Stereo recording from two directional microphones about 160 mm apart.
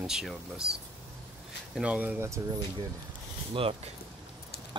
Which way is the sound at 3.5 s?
35° right (ahead or behind).